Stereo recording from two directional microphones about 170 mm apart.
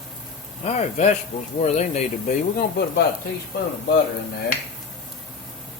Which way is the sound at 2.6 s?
65° left (ahead or behind).